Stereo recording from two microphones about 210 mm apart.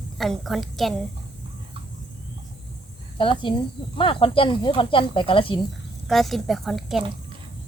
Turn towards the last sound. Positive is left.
turn(degrees=0)  # may be behind; listen again after turning